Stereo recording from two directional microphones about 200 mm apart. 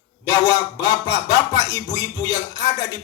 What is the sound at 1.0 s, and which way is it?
A man's voice, 15° left (ahead or behind).